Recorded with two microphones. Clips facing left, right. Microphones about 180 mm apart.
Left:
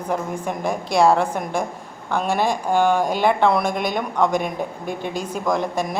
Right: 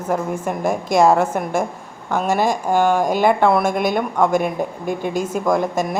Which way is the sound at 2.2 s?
45° right (ahead or behind).